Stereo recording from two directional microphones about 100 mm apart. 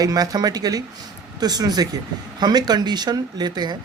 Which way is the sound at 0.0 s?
35° right (ahead or behind).